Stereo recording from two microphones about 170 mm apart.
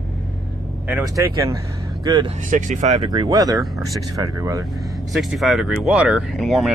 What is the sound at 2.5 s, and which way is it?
Speech, 45° right (ahead or behind).